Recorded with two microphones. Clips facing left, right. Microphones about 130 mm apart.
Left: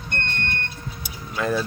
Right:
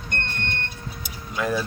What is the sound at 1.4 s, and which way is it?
Speech, 5° right (ahead or behind).